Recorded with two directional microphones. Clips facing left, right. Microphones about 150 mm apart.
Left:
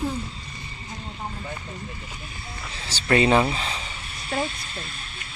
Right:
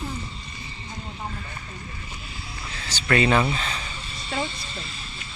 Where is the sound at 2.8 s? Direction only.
30° left (ahead or behind).